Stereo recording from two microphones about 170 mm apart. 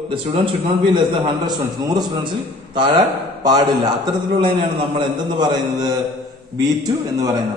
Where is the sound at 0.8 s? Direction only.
25° right (ahead or behind).